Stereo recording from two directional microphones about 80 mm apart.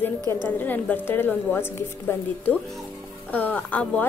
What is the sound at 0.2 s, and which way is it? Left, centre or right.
Speech, right.